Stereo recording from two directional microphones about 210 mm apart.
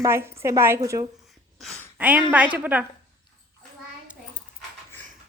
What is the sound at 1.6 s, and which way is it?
A woman's voice, centre (ahead or behind).